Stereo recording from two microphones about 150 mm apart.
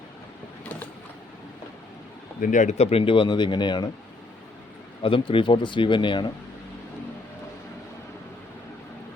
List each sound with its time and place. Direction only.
2.4 s speech: 55° left (ahead or behind); by 3.8 s 30° left (ahead or behind)
5.0 s speech: 35° left (ahead or behind)